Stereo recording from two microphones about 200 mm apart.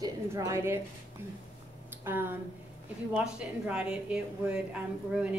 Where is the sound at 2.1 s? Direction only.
10° right (ahead or behind).